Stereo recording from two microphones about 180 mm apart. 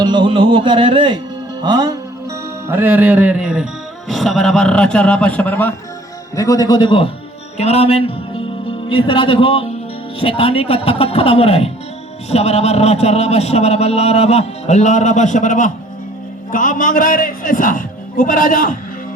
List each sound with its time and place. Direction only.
0.0 s music: 25° right (ahead or behind)
2.6 s a man's voice: 10° right (ahead or behind); by 18.8 s 50° left (ahead or behind)